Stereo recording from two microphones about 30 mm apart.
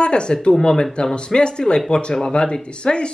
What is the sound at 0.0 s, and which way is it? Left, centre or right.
Speech, left.